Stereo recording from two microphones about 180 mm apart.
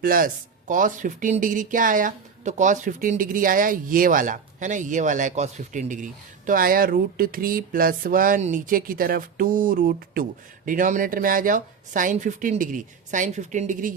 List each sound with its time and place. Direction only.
0.0 s speech: 50° right (ahead or behind)